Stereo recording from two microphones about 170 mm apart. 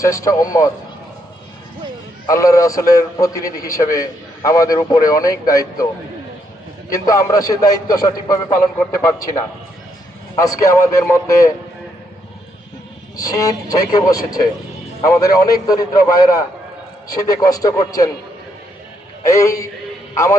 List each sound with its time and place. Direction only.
0.3 s a man's voice: 20° left (ahead or behind)
2.2 s a man's voice: 20° left (ahead or behind)
7.0 s a man's voice: 20° left (ahead or behind)
10.3 s a man's voice: 20° left (ahead or behind)
13.1 s a man's voice: 20° left (ahead or behind)
19.2 s a man's voice: 20° left (ahead or behind)